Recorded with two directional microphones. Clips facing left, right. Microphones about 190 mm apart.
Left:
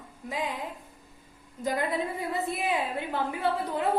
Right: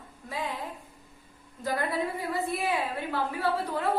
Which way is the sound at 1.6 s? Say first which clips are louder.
Left 1 dB; 20° left (ahead or behind).